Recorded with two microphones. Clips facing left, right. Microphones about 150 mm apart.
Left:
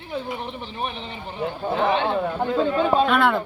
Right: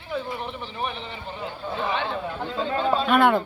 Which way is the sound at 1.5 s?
65° left (ahead or behind).